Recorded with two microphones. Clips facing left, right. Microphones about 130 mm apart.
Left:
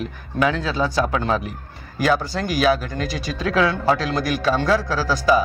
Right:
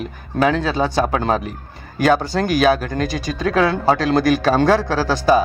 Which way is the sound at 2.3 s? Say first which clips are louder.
Right 3 dB; 55° right (ahead or behind).